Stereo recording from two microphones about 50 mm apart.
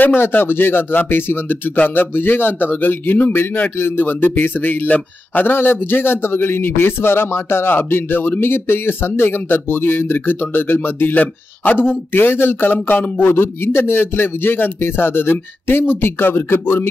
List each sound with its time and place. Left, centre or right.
0.0 s a man's voice: left
3.7 s a man's voice: left
5.4 s a man's voice: left
12.7 s a man's voice: left